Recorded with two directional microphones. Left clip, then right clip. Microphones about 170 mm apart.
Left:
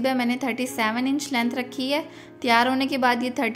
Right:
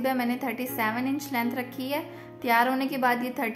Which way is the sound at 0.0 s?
25° left (ahead or behind).